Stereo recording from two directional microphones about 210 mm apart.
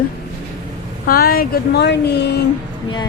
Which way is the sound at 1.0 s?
45° left (ahead or behind).